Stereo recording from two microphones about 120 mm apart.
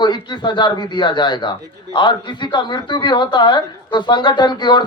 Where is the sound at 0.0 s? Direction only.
40° left (ahead or behind).